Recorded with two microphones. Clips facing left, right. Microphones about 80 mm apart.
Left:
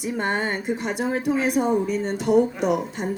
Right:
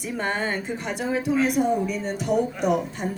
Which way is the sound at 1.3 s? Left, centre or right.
Left.